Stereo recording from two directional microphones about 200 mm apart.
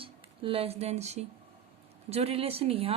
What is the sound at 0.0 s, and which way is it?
Speech, 30° right (ahead or behind).